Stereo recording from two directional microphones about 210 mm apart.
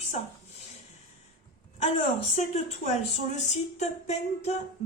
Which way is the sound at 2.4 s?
30° left (ahead or behind).